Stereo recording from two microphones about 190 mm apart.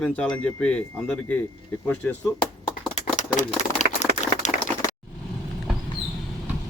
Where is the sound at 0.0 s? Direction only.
5° left (ahead or behind).